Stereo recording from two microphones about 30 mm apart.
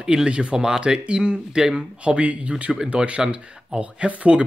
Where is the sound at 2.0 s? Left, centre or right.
Right.